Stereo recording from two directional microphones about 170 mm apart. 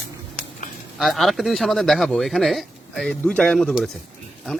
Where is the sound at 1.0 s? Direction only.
Centre (ahead or behind).